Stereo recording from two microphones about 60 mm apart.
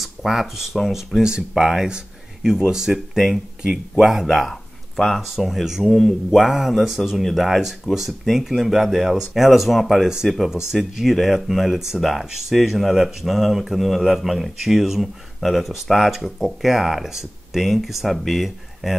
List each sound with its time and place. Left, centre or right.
0.0 s speech: centre
1.9 s a sound: centre
2.7 s speech: centre
3.6 s speech: centre
4.0 s speech: centre
4.9 s speech: centre
5.2 s speech: centre